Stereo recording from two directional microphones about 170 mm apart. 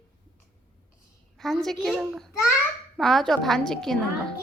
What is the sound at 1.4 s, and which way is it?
A woman's voice, centre (ahead or behind).